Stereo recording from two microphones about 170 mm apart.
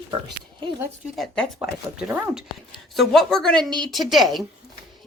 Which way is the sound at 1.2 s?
Centre (ahead or behind).